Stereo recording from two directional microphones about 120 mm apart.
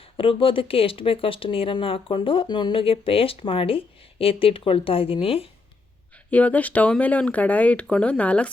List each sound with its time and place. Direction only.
0.0 s speech: 50° left (ahead or behind)
6.3 s speech: 10° left (ahead or behind)